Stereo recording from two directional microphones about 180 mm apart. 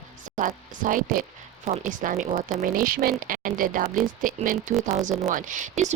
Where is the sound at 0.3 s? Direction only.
45° right (ahead or behind).